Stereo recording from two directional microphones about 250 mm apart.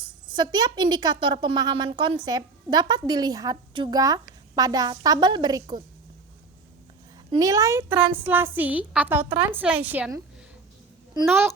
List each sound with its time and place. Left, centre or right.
0.3 s a woman's voice: centre
7.3 s a woman's voice: centre